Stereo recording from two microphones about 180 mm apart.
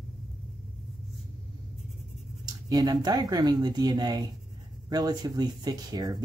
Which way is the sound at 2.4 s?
20° right (ahead or behind).